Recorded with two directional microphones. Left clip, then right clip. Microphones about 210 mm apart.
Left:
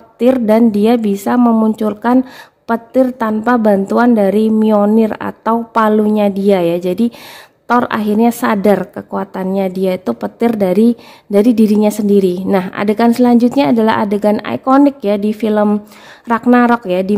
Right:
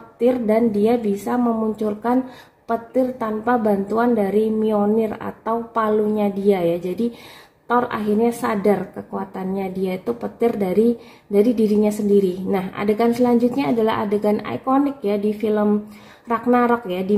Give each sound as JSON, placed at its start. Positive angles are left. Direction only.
{"t": 0.2, "sound": "a woman's voice", "side_deg": 55}